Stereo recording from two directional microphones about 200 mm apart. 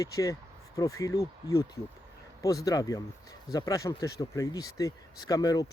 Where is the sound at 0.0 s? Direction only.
15° left (ahead or behind).